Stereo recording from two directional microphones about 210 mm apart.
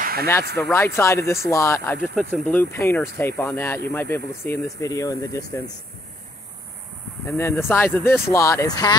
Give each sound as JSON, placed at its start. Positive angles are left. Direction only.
{"t": 0.0, "sound": "a sound", "side_deg": -45}
{"t": 0.7, "sound": "speech", "side_deg": 10}
{"t": 7.2, "sound": "speech", "side_deg": 10}